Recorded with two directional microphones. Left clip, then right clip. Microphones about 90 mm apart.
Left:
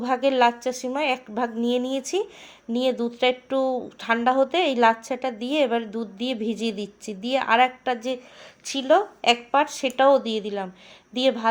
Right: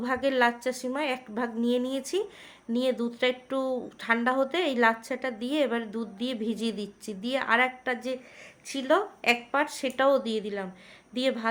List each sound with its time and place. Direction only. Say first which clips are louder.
0.0 s a woman's voice: left 5 dB; 25° left (ahead or behind)